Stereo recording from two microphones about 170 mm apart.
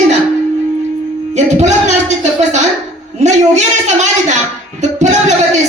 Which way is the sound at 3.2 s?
45° right (ahead or behind).